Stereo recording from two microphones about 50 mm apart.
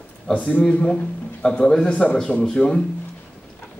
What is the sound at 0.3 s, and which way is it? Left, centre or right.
A man's voice, left.